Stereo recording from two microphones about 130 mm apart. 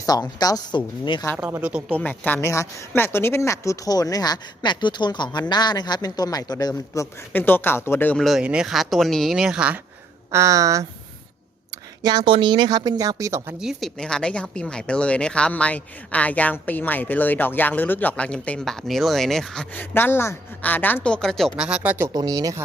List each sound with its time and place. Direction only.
0.0 s speech: 30° left (ahead or behind)
1.4 s speech: 15° right (ahead or behind)
1.9 s a woman's voice: 10° left (ahead or behind)
8.1 s speech: centre (ahead or behind)
10.3 s speech: 25° right (ahead or behind)
12.0 s speech: 35° right (ahead or behind)
13.6 s a woman's voice: centre (ahead or behind)
19.7 s a woman's voice: 15° left (ahead or behind)
21.5 s speech: 10° right (ahead or behind)
22.1 s speech: 30° right (ahead or behind)